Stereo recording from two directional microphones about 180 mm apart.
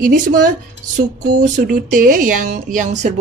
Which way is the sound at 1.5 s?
50° right (ahead or behind).